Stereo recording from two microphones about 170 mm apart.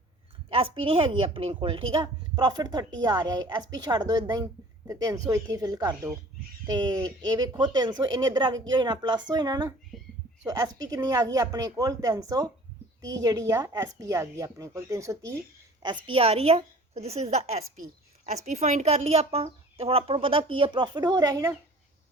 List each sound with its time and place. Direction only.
0.5 s a woman's voice: 35° right (ahead or behind)
16.0 s speech: 35° right (ahead or behind)